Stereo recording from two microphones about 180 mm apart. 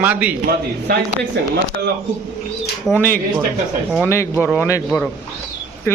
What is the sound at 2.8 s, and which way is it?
Speech, 10° left (ahead or behind).